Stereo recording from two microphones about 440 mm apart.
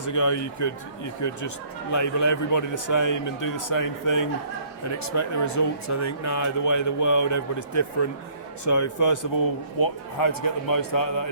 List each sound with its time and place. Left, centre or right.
0.0 s speech: left